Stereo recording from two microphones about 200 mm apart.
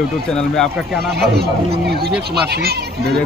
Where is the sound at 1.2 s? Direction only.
55° right (ahead or behind).